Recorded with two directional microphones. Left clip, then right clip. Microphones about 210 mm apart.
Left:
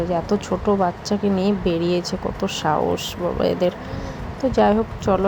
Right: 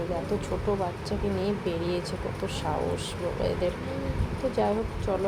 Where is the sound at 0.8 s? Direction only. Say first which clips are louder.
Left 9 dB; 25° left (ahead or behind).